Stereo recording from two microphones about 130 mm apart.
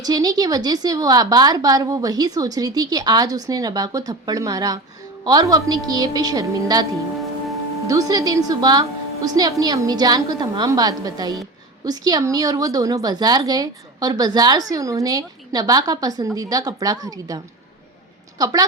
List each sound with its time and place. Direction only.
0.0 s a woman's voice: 30° right (ahead or behind)